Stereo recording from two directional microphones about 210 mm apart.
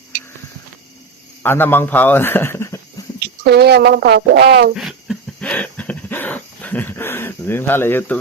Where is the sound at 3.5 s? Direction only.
50° right (ahead or behind).